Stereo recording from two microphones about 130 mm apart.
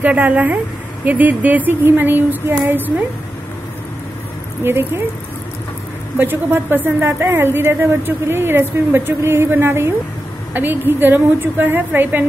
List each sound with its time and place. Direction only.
0.0 s a woman's voice: 10° right (ahead or behind)
4.6 s a woman's voice: 15° right (ahead or behind)
6.1 s a woman's voice: 15° right (ahead or behind)